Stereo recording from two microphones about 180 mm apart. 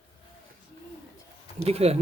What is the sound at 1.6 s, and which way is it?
Speech, 35° right (ahead or behind).